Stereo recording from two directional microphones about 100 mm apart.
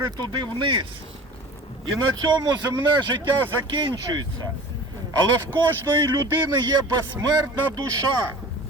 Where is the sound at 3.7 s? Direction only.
55° right (ahead or behind).